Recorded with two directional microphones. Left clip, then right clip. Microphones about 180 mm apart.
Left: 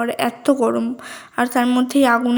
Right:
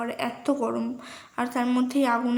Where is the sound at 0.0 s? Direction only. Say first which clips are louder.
Left 9 dB; 35° left (ahead or behind).